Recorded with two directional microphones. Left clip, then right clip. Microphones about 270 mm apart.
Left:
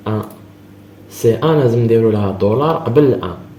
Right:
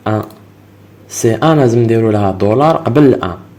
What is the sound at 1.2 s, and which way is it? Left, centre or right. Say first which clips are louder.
Speech: right 2 dB; right.